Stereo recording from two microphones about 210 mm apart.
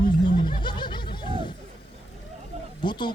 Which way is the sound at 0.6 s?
20° left (ahead or behind).